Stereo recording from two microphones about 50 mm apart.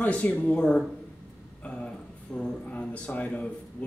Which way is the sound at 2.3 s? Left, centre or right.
Left.